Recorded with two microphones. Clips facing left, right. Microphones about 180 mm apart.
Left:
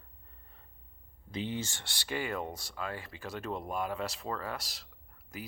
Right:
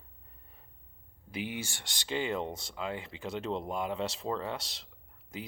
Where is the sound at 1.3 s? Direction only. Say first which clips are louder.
Left 1 dB; 10° right (ahead or behind).